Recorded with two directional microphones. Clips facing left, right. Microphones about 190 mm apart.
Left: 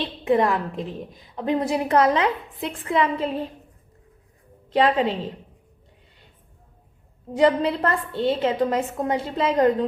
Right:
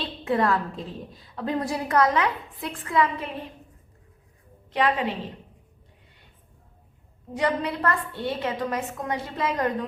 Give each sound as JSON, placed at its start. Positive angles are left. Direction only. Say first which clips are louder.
{"t": 0.3, "sound": "a woman's voice", "louder": "left 3 dB", "side_deg": 20}
{"t": 4.7, "sound": "a woman's voice", "louder": "left 5 dB", "side_deg": 30}
{"t": 7.3, "sound": "a woman's voice", "louder": "left 7 dB", "side_deg": 25}